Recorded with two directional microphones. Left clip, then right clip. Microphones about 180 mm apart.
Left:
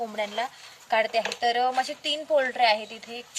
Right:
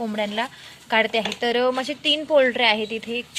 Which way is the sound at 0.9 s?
30° right (ahead or behind).